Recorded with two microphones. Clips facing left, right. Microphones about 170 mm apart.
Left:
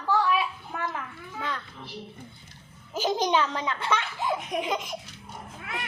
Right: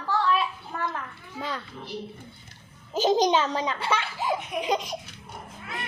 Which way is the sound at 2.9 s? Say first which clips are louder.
Right 4 dB; 20° right (ahead or behind).